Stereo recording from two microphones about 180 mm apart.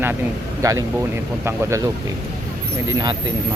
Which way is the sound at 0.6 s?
20° right (ahead or behind).